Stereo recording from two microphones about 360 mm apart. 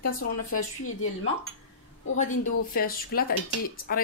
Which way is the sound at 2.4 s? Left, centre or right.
Left.